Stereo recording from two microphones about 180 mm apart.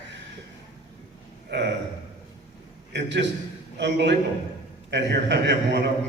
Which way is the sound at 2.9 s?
80° right.